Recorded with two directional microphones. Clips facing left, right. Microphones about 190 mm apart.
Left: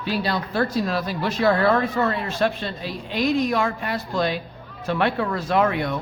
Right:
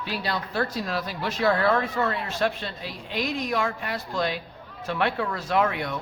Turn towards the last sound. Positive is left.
turn(degrees=35)  # may be behind; listen again after turning